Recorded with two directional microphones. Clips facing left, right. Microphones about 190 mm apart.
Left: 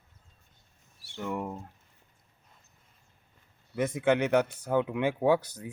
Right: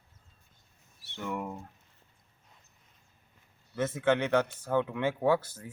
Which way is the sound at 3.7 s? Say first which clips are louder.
Left 2 dB; 15° left (ahead or behind).